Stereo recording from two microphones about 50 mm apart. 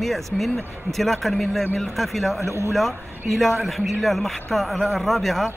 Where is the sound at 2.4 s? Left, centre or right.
Right.